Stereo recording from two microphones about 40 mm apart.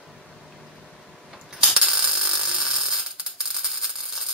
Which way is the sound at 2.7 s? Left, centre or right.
Centre.